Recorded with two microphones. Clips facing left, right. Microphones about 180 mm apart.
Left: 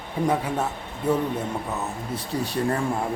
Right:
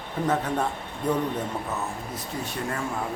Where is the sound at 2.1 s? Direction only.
35° left (ahead or behind).